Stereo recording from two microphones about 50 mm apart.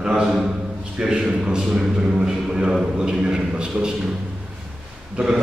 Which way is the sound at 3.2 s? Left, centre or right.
Centre.